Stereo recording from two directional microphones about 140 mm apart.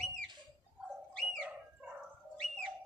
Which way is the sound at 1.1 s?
5° left (ahead or behind).